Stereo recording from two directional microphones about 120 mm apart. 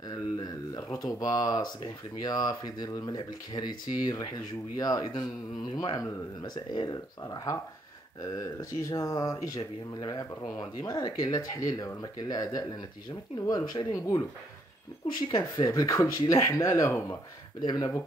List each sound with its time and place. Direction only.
0.4 s speech: 30° left (ahead or behind)
15.2 s speech: 35° left (ahead or behind)
17.6 s speech: 35° left (ahead or behind)